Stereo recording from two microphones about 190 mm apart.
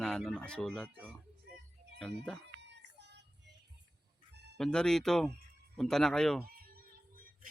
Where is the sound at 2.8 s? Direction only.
65° right (ahead or behind).